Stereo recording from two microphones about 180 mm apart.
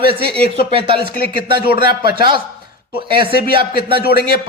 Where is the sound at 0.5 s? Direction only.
30° right (ahead or behind).